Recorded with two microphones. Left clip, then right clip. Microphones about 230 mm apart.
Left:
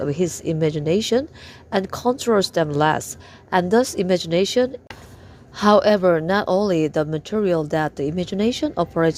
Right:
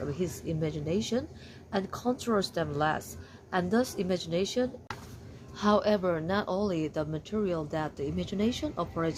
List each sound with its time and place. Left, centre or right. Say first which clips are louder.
0.0 s a woman's voice: left 12 dB; left